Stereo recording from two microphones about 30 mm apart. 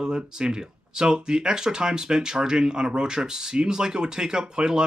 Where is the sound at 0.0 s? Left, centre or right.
Right.